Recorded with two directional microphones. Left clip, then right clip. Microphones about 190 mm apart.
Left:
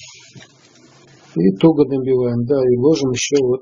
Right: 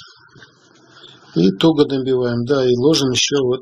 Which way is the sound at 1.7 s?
25° right (ahead or behind).